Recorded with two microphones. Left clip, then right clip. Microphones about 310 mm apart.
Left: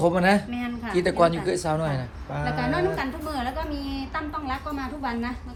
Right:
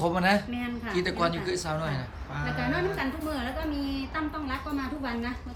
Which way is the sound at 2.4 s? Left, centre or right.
Centre.